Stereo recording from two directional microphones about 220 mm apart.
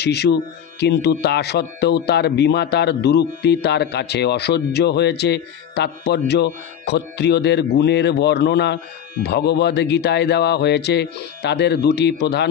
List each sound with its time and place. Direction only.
0.0 s speech: 50° left (ahead or behind)